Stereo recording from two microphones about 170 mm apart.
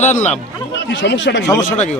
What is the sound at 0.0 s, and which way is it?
Speech, 45° left (ahead or behind).